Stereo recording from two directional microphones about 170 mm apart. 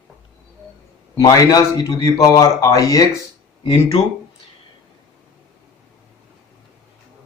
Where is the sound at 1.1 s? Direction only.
20° left (ahead or behind).